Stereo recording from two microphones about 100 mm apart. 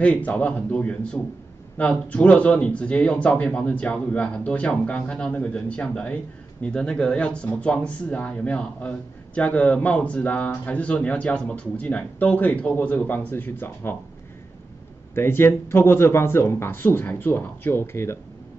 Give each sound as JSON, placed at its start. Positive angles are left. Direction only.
{"t": 0.0, "sound": "speech", "side_deg": 15}
{"t": 15.1, "sound": "speech", "side_deg": 25}